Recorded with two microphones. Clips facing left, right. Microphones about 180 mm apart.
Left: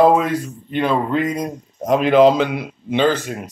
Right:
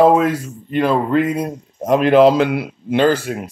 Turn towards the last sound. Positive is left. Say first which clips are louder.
# right 2 dB
turn(degrees=-10)  # may be behind; listen again after turning